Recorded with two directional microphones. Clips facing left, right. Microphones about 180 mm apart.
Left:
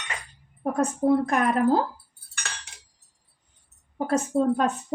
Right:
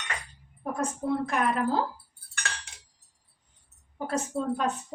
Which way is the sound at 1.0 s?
45° left (ahead or behind).